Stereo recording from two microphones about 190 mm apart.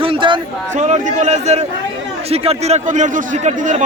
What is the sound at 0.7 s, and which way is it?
A man's voice, 40° right (ahead or behind).